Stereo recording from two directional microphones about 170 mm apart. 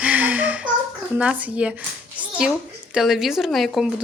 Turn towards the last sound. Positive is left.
turn(degrees=0)  # may be behind; listen again after turning